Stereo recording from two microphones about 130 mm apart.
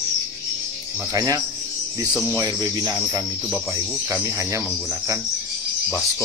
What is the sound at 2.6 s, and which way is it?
Speech, 25° right (ahead or behind).